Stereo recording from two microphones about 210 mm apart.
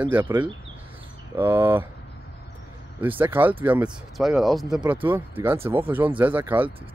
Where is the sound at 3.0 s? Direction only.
10° right (ahead or behind).